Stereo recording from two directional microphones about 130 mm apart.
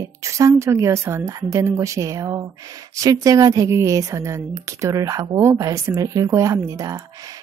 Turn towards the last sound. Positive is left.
turn(degrees=-25)  # may be behind; listen again after turning